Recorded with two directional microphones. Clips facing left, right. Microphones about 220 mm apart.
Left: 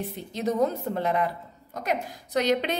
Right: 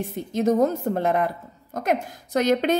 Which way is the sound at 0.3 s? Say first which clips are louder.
Right 5 dB; 45° right (ahead or behind).